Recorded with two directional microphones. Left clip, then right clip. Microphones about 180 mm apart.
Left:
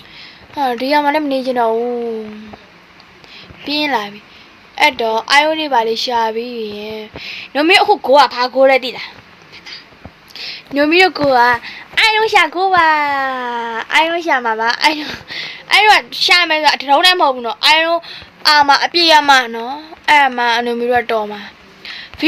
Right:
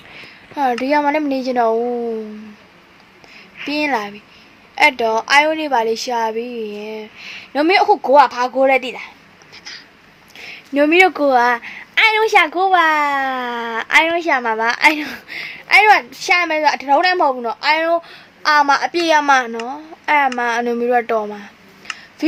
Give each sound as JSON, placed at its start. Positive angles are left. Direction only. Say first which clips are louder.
{"t": 0.2, "sound": "a woman's voice", "louder": "left 1 dB", "side_deg": -25}
{"t": 3.7, "sound": "a child's voice", "louder": "left 2 dB", "side_deg": -20}
{"t": 6.4, "sound": "a sound", "louder": "left 2 dB", "side_deg": -50}
{"t": 6.7, "sound": "a woman's voice", "louder": "left 3 dB", "side_deg": -15}
{"t": 10.3, "sound": "a child's voice", "louder": "left 1 dB", "side_deg": -25}
{"t": 21.9, "sound": "a sound", "louder": "left 5 dB", "side_deg": -25}